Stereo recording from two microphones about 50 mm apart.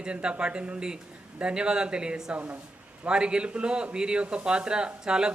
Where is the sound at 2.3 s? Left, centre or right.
Right.